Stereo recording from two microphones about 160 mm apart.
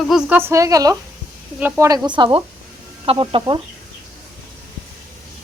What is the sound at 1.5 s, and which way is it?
Speech, 10° right (ahead or behind).